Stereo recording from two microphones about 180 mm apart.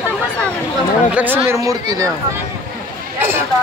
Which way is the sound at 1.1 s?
10° right (ahead or behind).